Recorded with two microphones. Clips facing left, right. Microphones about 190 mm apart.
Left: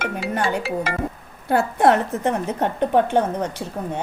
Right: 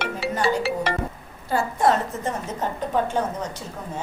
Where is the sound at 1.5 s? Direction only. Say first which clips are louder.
Left 4 dB; 60° left (ahead or behind).